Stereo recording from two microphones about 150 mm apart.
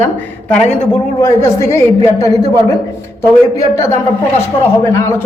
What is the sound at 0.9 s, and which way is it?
A man's voice, 15° left (ahead or behind).